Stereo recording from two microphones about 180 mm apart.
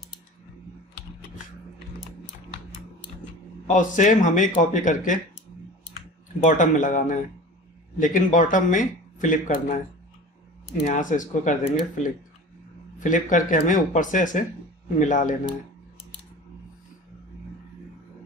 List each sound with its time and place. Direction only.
3.6 s speech: 45° left (ahead or behind)
6.4 s speech: 45° left (ahead or behind)
10.8 s speech: 45° left (ahead or behind)